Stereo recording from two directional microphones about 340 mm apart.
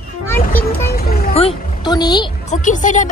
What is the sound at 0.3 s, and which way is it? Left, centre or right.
Music, centre.